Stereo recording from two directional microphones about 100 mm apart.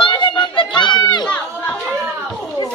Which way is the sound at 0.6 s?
50° left (ahead or behind).